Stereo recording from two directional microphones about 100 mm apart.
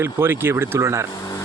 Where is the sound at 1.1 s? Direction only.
40° left (ahead or behind).